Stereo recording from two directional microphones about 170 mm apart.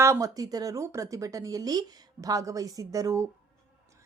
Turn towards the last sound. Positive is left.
turn(degrees=-20)  # may be behind; listen again after turning